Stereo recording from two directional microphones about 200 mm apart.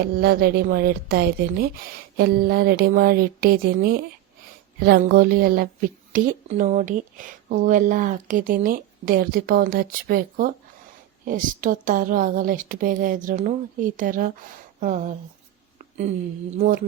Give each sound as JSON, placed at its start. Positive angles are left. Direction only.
{"t": 0.2, "sound": "a woman's voice", "side_deg": -50}
{"t": 16.6, "sound": "a woman's voice", "side_deg": -40}